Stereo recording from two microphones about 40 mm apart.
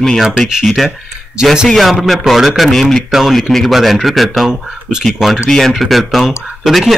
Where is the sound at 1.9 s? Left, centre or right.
Centre.